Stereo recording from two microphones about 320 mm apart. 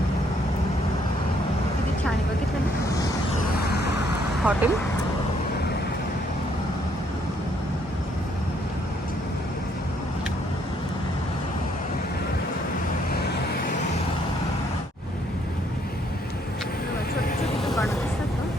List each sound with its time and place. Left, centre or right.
3.7 s vehicle: left
4.5 s speech: centre
17.6 s vehicle: centre